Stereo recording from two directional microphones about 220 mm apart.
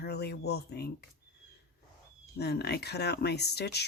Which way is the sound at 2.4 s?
50° left (ahead or behind).